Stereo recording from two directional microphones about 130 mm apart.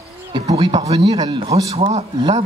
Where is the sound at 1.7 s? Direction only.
60° right (ahead or behind).